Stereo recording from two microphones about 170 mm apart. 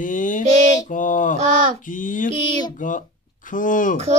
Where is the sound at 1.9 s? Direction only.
50° left (ahead or behind).